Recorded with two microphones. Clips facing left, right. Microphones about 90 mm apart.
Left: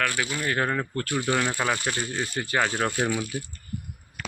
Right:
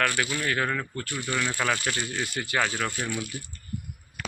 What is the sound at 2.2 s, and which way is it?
Speech, 30° left (ahead or behind).